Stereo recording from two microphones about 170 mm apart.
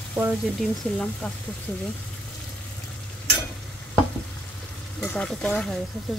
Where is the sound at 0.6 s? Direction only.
5° left (ahead or behind).